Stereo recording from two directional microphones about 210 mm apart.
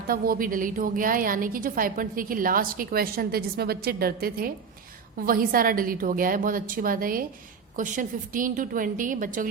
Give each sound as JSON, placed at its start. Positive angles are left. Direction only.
{"t": 0.1, "sound": "a woman's voice", "side_deg": -40}